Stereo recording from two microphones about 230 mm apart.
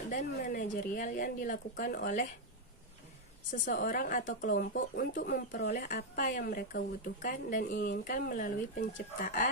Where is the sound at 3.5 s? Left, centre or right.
Left.